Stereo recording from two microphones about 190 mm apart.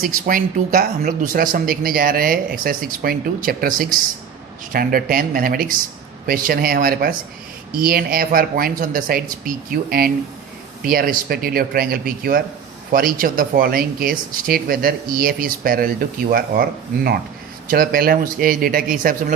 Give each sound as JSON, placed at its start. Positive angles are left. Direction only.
{"t": 0.0, "sound": "speech", "side_deg": -45}